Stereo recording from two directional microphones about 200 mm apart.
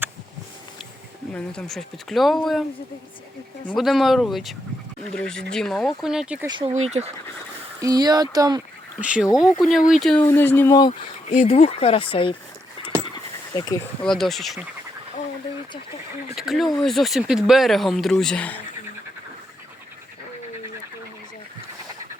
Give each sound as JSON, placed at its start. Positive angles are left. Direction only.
{"t": 1.3, "sound": "speech", "side_deg": 5}
{"t": 3.8, "sound": "speech", "side_deg": 0}
{"t": 6.6, "sound": "speech", "side_deg": -30}
{"t": 7.8, "sound": "speech", "side_deg": -20}
{"t": 9.0, "sound": "speech", "side_deg": -5}
{"t": 13.6, "sound": "speech", "side_deg": 20}
{"t": 14.0, "sound": "speech", "side_deg": 0}
{"t": 16.3, "sound": "speech", "side_deg": 0}